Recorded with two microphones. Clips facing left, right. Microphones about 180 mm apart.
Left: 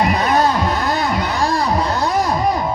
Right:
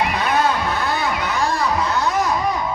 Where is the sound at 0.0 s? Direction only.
40° left (ahead or behind).